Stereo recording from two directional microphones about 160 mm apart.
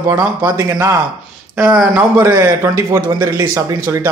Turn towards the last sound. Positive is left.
turn(degrees=-15)  # may be behind; listen again after turning